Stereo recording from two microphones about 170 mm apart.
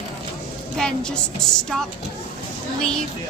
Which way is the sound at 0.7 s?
5° left (ahead or behind).